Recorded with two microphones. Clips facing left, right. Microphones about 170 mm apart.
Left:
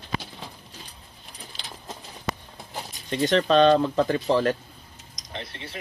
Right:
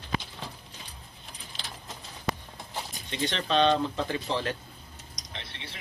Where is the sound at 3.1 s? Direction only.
40° left (ahead or behind).